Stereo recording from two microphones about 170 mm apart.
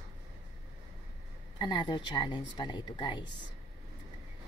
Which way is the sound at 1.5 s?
25° left (ahead or behind).